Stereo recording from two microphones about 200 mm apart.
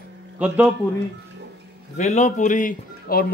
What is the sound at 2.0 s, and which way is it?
Speech, 35° left (ahead or behind).